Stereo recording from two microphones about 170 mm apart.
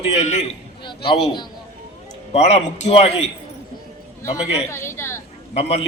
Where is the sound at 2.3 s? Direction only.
40° left (ahead or behind).